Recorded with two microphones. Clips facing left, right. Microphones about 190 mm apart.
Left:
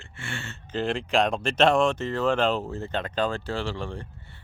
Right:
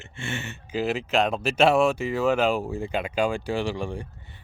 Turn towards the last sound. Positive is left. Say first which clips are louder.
# right 3 dB
turn(degrees=-15)  # may be behind; listen again after turning